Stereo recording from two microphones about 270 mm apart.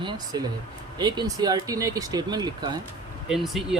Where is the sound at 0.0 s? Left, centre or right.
Centre.